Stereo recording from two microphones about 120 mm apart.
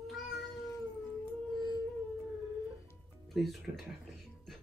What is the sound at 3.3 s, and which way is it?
Speech, centre (ahead or behind).